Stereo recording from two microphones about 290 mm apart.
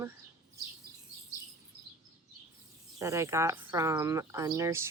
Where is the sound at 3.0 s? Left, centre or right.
Centre.